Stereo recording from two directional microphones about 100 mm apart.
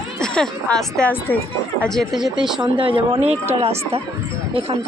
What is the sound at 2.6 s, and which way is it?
Speech, 60° right (ahead or behind).